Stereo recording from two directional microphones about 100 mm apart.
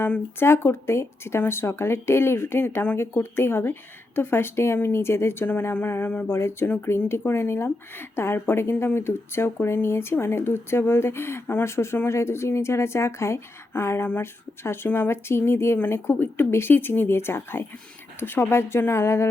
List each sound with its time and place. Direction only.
0.0 s speech: 20° left (ahead or behind)